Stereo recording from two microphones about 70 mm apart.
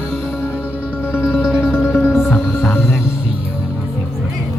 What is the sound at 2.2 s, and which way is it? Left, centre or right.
Music, left.